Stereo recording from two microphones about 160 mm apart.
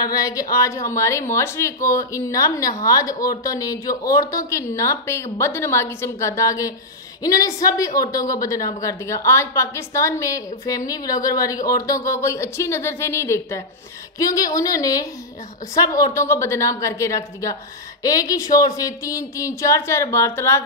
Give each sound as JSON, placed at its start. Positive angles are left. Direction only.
{"t": 0.0, "sound": "speech", "side_deg": 20}